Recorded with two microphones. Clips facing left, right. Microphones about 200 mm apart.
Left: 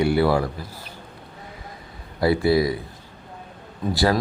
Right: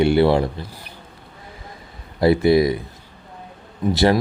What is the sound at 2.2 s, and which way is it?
Speech, 20° right (ahead or behind).